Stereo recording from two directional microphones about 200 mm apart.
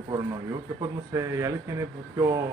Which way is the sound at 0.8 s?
15° right (ahead or behind).